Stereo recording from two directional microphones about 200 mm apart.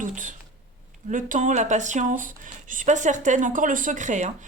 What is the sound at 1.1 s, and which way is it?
A woman's voice, 40° right (ahead or behind).